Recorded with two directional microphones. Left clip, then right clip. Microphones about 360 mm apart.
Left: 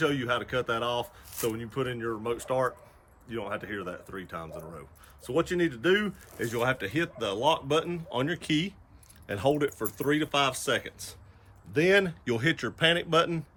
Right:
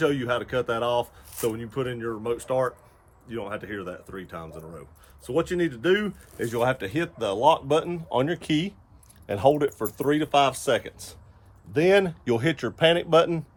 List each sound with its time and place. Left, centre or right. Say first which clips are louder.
0.0 s speech: right 3 dB; centre